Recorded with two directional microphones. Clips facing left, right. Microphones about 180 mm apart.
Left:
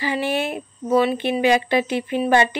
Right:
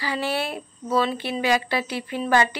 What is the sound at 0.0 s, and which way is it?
Speech, 20° left (ahead or behind).